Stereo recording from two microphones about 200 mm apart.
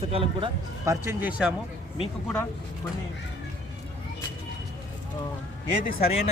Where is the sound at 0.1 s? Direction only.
25° right (ahead or behind).